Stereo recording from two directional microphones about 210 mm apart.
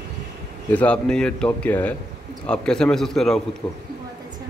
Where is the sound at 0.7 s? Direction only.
5° left (ahead or behind).